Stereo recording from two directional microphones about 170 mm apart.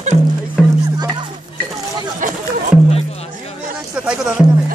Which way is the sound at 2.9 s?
40° left (ahead or behind).